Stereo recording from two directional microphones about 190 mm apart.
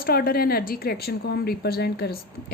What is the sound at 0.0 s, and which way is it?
A woman's voice, 55° left (ahead or behind).